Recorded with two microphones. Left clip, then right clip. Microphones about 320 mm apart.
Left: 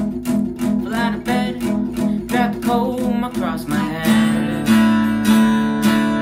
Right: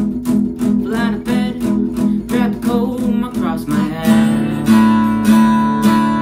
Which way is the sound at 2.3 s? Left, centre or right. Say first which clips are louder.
Left 1 dB; centre.